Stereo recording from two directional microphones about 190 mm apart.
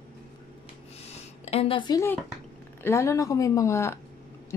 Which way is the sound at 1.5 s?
30° left (ahead or behind).